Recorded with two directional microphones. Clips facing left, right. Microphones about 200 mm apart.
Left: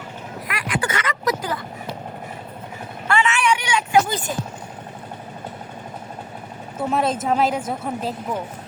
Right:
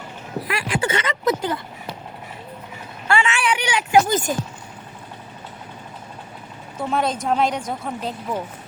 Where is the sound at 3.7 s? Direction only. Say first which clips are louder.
Right 5 dB; 45° right (ahead or behind).